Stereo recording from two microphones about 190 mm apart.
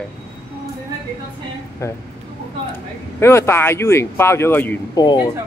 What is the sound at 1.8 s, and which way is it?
Speech, 15° left (ahead or behind).